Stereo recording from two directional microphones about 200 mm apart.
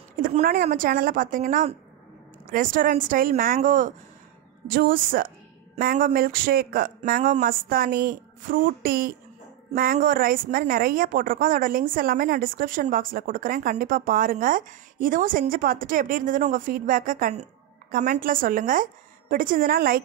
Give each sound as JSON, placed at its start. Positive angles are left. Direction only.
{"t": 0.2, "sound": "speech", "side_deg": -45}